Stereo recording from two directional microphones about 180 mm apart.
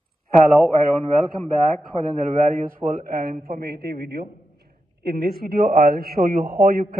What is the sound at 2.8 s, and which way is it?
Speech, 25° right (ahead or behind).